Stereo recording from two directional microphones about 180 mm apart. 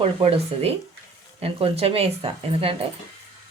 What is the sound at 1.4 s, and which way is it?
Speech, 35° right (ahead or behind).